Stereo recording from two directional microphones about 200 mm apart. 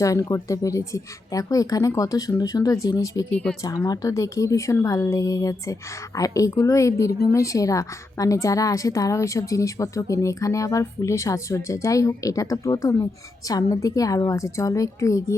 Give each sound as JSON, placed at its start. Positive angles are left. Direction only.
{"t": 0.0, "sound": "a woman's voice", "side_deg": 15}